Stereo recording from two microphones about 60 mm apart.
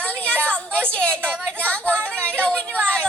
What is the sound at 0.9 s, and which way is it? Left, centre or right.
Speech, centre.